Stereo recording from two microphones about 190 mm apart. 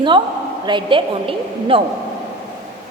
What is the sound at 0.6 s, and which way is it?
A woman's voice, 25° right (ahead or behind).